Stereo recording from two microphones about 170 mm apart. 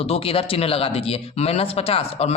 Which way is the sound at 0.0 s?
35° left (ahead or behind).